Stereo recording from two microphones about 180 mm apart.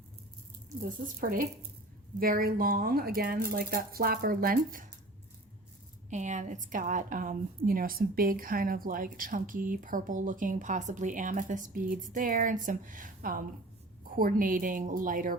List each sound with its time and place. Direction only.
0.9 s a woman's voice: 50° right (ahead or behind)
6.1 s a woman's voice: 40° right (ahead or behind)